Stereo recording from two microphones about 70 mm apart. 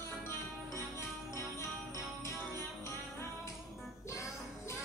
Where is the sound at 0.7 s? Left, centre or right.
Left.